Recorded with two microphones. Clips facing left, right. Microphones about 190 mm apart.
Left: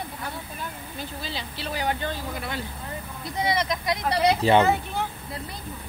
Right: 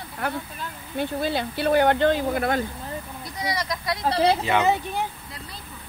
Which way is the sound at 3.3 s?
25° left (ahead or behind).